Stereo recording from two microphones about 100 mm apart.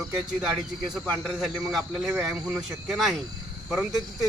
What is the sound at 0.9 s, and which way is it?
Speech, 5° right (ahead or behind).